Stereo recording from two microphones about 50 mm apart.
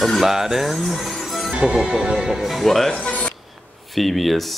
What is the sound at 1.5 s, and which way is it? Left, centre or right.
Speech, centre.